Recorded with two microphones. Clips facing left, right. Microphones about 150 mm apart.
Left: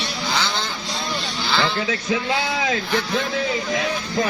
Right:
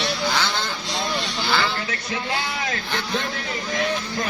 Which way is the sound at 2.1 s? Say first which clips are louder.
Left 4 dB; 90° left.